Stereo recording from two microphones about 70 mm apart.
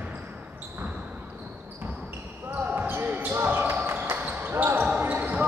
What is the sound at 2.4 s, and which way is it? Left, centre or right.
Basketball bounce, right.